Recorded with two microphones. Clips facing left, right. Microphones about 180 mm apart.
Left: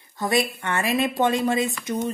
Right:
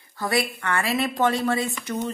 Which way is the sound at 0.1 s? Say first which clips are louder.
Left 2 dB; 20° left (ahead or behind).